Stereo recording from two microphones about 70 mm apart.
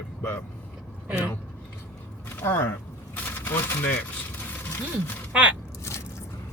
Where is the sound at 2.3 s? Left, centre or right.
Left.